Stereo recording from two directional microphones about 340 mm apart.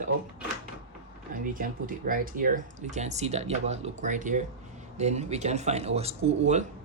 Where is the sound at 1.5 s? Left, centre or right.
Right.